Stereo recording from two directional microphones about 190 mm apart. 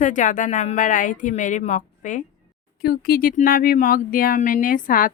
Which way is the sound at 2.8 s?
50° left (ahead or behind).